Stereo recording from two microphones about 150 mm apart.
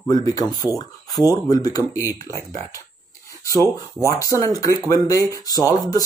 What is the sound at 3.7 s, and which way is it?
Speech, 20° left (ahead or behind).